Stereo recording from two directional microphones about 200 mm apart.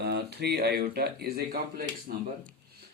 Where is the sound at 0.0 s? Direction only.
55° right (ahead or behind).